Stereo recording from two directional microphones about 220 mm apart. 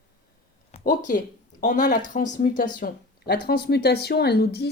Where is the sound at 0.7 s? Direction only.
35° left (ahead or behind).